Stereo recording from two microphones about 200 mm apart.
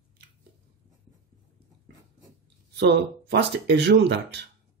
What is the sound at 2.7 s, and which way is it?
Speech, 60° right (ahead or behind).